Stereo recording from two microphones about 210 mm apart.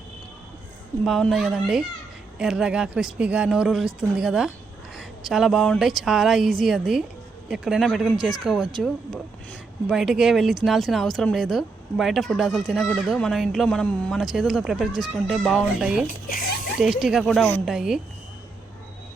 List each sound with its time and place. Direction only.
1.0 s speech: centre (ahead or behind)
16.0 s speech: 40° left (ahead or behind)
16.8 s speech: centre (ahead or behind)